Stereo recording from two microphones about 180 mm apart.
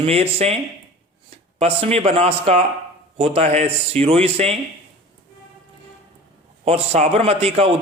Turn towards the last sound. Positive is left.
turn(degrees=-35)  # may be behind; listen again after turning